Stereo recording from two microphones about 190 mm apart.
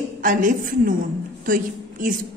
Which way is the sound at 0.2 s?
45° right (ahead or behind).